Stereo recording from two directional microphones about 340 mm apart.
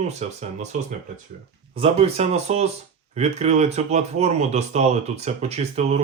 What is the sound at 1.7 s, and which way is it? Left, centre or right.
Speech, centre.